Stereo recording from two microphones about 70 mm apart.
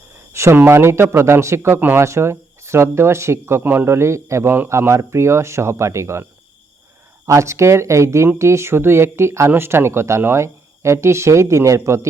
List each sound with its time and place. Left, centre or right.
0.5 s speech: right
3.8 s speech: right
7.3 s speech: right